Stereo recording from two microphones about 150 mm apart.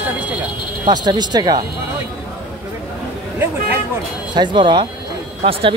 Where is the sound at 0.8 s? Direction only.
30° right (ahead or behind).